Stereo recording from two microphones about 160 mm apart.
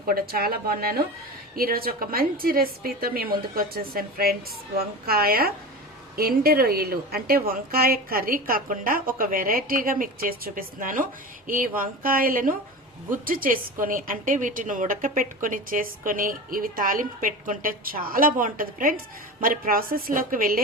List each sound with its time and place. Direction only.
0.1 s a woman's voice: 70° right (ahead or behind)